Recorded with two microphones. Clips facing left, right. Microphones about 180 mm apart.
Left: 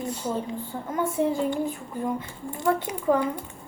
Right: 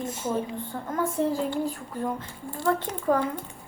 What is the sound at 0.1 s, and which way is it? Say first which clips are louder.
Speech: right 1 dB; 20° right (ahead or behind).